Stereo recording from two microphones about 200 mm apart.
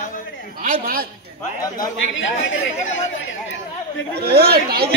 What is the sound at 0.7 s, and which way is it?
Speech, 45° right (ahead or behind).